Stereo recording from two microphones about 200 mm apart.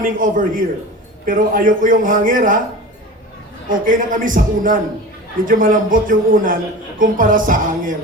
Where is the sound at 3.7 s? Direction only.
40° right (ahead or behind).